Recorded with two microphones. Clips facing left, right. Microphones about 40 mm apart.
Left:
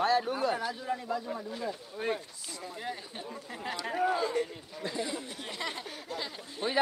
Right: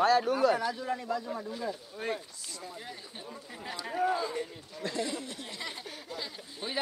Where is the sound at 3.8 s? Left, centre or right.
Centre.